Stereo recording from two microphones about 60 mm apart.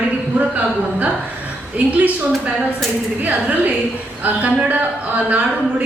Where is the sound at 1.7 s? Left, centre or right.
Right.